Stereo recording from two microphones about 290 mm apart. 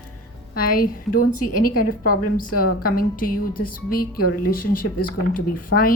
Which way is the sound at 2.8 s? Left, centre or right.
Left.